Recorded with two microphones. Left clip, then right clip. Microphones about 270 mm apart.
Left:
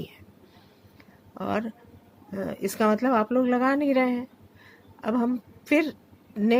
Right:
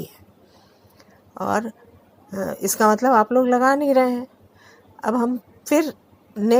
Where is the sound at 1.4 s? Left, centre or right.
Centre.